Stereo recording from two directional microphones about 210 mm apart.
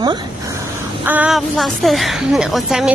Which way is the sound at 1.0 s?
5° right (ahead or behind).